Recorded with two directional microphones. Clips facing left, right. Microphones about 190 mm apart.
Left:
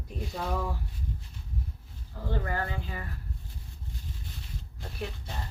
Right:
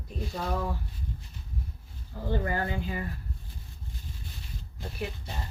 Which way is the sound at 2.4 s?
20° right (ahead or behind).